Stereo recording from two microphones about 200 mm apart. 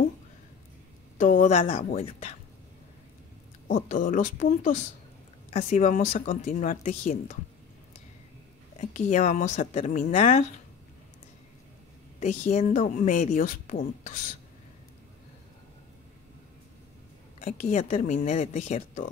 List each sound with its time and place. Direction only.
1.2 s a woman's voice: 40° left (ahead or behind)
3.6 s speech: 40° left (ahead or behind)
8.7 s speech: 35° left (ahead or behind)
12.2 s speech: 35° left (ahead or behind)
17.4 s speech: 35° left (ahead or behind)